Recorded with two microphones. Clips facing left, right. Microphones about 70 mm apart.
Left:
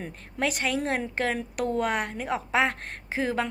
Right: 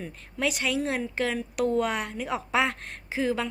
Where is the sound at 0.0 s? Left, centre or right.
Left.